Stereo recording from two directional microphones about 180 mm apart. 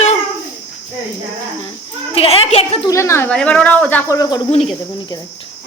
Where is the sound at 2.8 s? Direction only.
15° left (ahead or behind).